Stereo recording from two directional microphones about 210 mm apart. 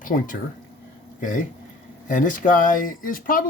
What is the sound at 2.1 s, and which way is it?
Speech, 40° left (ahead or behind).